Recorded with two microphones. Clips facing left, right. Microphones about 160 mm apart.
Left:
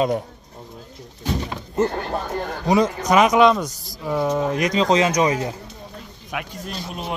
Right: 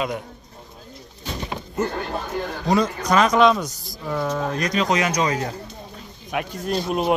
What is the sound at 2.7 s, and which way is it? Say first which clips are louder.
Speech: left 2 dB; 15° left (ahead or behind).